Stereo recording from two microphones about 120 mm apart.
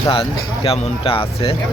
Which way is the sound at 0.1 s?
50° left (ahead or behind).